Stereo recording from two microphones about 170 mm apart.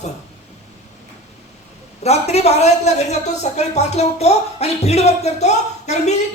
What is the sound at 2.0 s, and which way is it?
Speech, 40° left (ahead or behind).